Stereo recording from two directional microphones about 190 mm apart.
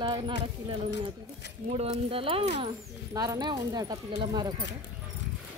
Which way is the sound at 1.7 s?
35° right (ahead or behind).